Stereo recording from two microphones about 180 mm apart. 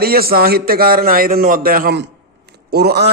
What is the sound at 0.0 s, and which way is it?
A man's voice, 55° right (ahead or behind).